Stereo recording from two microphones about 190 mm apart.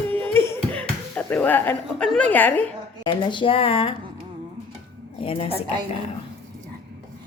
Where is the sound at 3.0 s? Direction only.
25° left (ahead or behind).